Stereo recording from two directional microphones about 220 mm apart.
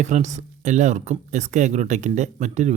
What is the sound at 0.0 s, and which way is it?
Speech, 30° right (ahead or behind).